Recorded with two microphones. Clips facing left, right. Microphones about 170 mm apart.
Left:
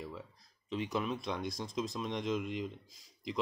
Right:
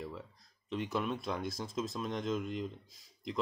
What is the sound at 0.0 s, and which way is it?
Speech, centre (ahead or behind).